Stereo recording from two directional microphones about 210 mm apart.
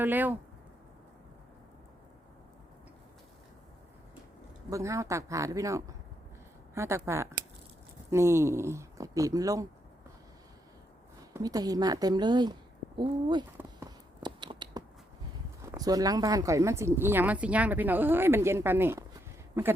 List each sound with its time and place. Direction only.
0.0 s speech: 10° right (ahead or behind)
4.7 s speech: 15° right (ahead or behind)
11.3 s speech: 15° right (ahead or behind)
13.6 s a sound: 20° right (ahead or behind)
15.6 s speech: 15° right (ahead or behind)